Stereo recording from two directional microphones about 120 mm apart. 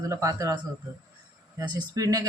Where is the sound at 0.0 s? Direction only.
25° right (ahead or behind).